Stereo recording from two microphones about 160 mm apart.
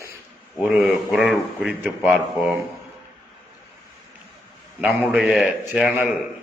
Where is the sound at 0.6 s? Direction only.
5° right (ahead or behind).